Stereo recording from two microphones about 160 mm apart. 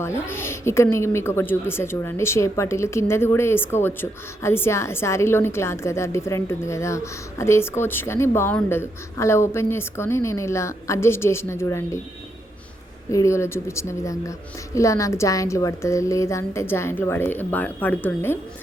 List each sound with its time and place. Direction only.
0.0 s a woman's voice: 15° left (ahead or behind)
13.1 s a woman's voice: 20° left (ahead or behind)